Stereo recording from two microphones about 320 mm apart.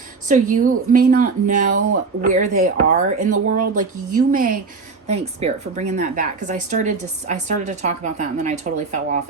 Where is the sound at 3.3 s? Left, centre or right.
Right.